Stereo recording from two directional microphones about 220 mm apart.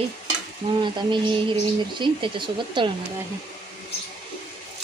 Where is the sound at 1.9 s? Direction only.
20° right (ahead or behind).